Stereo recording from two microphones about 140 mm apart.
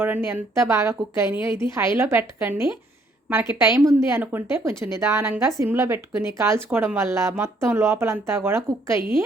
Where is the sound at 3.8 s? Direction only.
20° right (ahead or behind).